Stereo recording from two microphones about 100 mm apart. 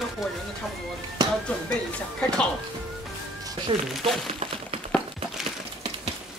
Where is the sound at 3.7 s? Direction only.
65° right (ahead or behind).